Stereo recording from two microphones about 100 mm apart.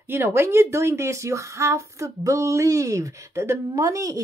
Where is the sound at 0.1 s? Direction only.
25° right (ahead or behind).